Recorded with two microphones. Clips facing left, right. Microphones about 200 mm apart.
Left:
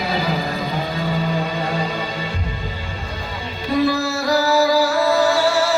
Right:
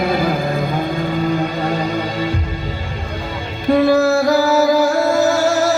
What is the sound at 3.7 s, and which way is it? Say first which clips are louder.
Music: right 6 dB; 55° right (ahead or behind).